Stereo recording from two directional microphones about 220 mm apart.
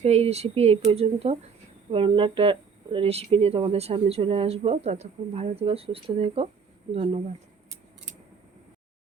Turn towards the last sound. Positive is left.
turn(degrees=-25)  # may be behind; listen again after turning